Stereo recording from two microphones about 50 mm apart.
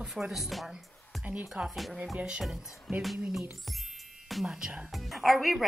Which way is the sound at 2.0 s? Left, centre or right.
Centre.